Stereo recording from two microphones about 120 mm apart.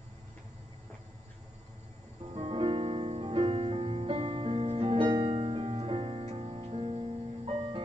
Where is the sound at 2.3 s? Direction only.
55° right (ahead or behind).